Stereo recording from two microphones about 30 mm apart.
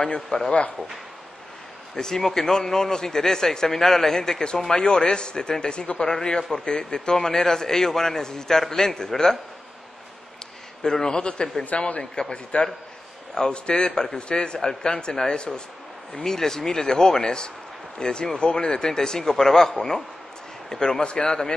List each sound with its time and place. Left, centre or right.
0.0 s speech: left
2.0 s a man's voice: centre
10.8 s speech: left
11.1 s speech: left
16.3 s a man's voice: centre
21.0 s speech: left